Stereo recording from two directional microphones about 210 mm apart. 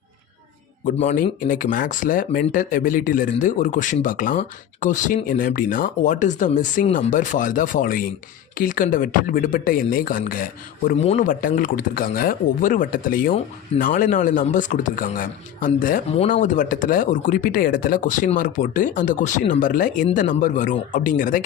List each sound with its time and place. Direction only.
1.0 s speech: 40° left (ahead or behind)
10.8 s speech: 30° left (ahead or behind)